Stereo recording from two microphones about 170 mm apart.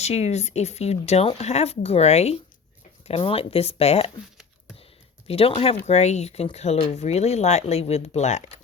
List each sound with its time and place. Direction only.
0.0 s speech: 40° left (ahead or behind)
5.3 s speech: 35° left (ahead or behind)